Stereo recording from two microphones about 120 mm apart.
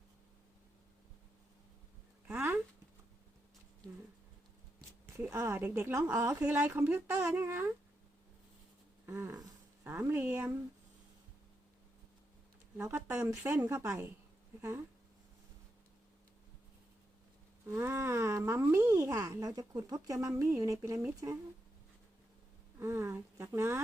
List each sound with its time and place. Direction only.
5.0 s speech: 20° right (ahead or behind)
9.0 s speech: 25° right (ahead or behind)
12.7 s speech: 20° right (ahead or behind)
17.7 s speech: 20° right (ahead or behind)
22.8 s speech: 20° right (ahead or behind)